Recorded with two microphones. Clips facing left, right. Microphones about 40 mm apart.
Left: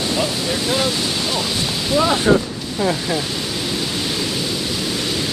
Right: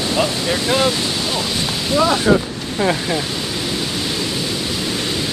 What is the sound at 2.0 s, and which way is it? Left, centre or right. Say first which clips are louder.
Ocean: right 2 dB; centre.